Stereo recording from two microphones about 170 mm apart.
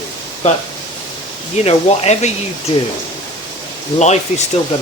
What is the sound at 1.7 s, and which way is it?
Speech, 40° left (ahead or behind).